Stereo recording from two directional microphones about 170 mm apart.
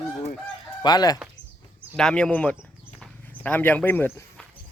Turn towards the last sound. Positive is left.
turn(degrees=10)  # may be behind; listen again after turning